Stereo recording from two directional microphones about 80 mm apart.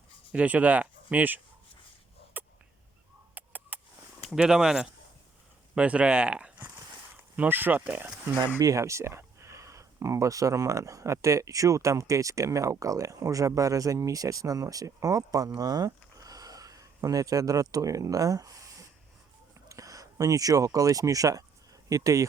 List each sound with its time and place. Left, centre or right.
0.3 s speech: centre
2.3 s a sound: right
4.3 s speech: centre
7.3 s speech: right
8.5 s speech: right